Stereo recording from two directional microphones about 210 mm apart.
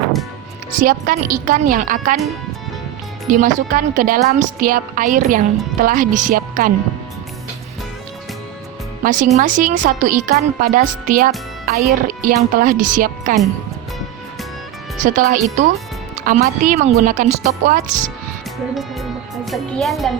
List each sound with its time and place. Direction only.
0.8 s a woman's voice: 40° right (ahead or behind)
3.2 s a woman's voice: 40° right (ahead or behind)
9.0 s a woman's voice: 40° right (ahead or behind)
15.0 s a woman's voice: 35° right (ahead or behind)
18.7 s a child's voice: centre (ahead or behind)